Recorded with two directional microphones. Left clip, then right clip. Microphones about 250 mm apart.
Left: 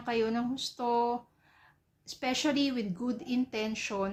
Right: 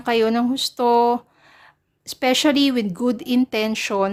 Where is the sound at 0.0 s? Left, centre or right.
Right.